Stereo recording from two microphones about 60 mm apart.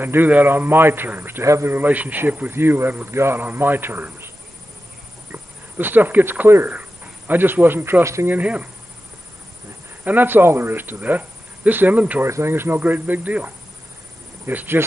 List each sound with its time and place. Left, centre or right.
0.0 s a man's voice: right
1.4 s a man's voice: right
1.7 s speech: right
2.5 s a man's voice: right
3.1 s a man's voice: right
3.4 s a man's voice: right
5.3 s a man's voice: right
8.0 s a man's voice: right
8.3 s speech: right
10.0 s a man's voice: right
12.3 s a man's voice: right